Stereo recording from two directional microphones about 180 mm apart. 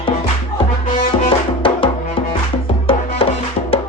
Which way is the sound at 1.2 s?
30° left (ahead or behind).